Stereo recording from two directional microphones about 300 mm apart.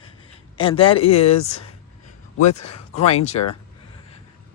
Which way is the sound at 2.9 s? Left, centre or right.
Left.